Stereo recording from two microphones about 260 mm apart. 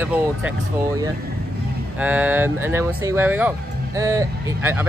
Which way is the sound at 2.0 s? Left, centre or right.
Centre.